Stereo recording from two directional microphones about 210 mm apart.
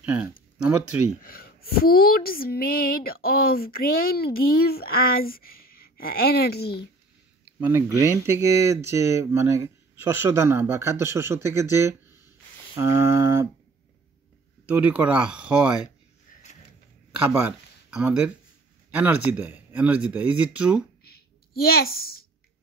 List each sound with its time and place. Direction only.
0.0 s speech: 5° right (ahead or behind)
1.2 s speech: 45° left (ahead or behind)
7.6 s speech: 10° right (ahead or behind)
14.7 s speech: 5° right (ahead or behind)
17.3 s speech: 5° right (ahead or behind)
21.0 s a sound: 45° left (ahead or behind)